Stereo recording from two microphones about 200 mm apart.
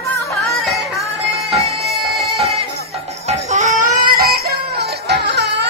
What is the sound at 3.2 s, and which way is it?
Music, 35° right (ahead or behind).